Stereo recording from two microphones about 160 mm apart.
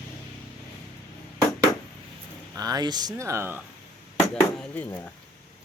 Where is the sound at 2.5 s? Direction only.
25° right (ahead or behind).